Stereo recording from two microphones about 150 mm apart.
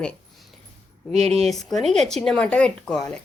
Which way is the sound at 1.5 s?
Centre (ahead or behind).